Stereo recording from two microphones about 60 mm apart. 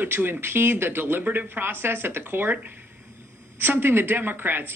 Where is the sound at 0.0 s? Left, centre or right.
Right.